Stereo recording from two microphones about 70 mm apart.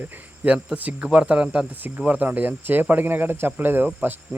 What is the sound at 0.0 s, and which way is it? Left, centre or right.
Cricket, right.